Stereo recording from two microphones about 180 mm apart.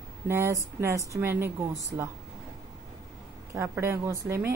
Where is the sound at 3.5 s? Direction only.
15° right (ahead or behind).